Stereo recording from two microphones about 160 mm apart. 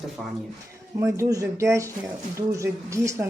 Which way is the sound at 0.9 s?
15° right (ahead or behind).